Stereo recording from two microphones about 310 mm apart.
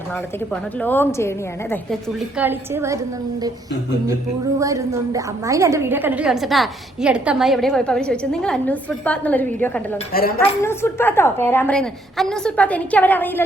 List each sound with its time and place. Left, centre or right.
0.5 s a woman's voice: centre
10.1 s a woman's voice: left
10.6 s a woman's voice: centre